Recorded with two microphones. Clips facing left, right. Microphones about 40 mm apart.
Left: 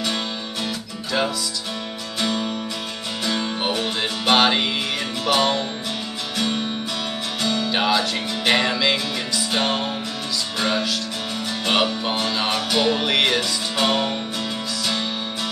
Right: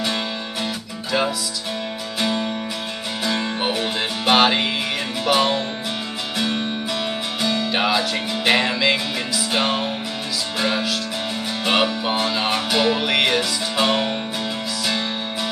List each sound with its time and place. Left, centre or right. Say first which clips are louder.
2.1 s music: right 1 dB; centre
3.5 s music: right 1 dB; centre
7.7 s music: left 1 dB; centre